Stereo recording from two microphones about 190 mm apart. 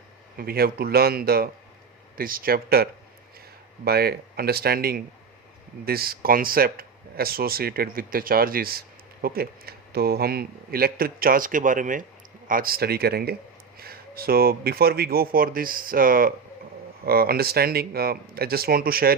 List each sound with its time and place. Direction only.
0.3 s speech: 50° right (ahead or behind)